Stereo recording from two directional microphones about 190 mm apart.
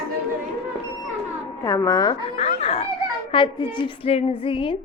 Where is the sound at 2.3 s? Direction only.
35° left (ahead or behind).